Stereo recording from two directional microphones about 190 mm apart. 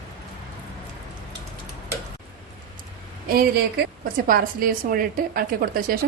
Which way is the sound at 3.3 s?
50° right (ahead or behind).